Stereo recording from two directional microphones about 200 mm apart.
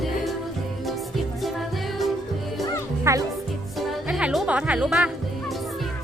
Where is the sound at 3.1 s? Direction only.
15° right (ahead or behind).